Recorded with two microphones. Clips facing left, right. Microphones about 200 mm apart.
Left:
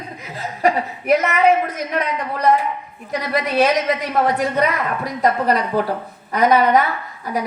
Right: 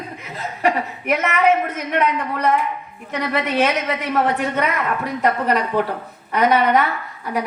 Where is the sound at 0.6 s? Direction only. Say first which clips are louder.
Left 2 dB; 35° left (ahead or behind).